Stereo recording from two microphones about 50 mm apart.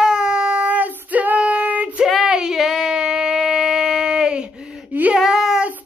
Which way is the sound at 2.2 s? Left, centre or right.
Centre.